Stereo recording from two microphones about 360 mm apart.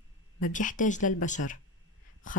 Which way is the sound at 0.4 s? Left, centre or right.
Left.